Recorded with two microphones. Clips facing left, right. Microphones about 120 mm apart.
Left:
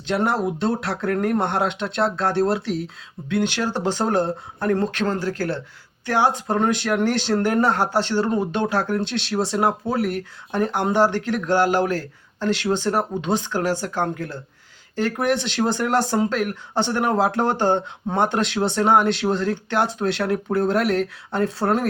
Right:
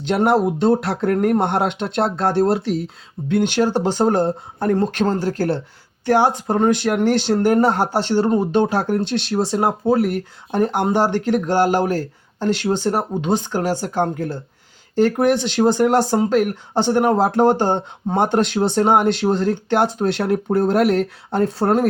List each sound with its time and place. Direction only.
0.1 s speech: 60° right (ahead or behind); by 21.8 s 45° right (ahead or behind)